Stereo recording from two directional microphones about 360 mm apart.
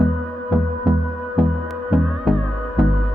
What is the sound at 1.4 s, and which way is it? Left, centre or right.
Music, centre.